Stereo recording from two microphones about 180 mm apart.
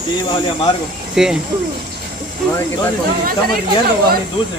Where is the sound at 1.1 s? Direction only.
5° right (ahead or behind).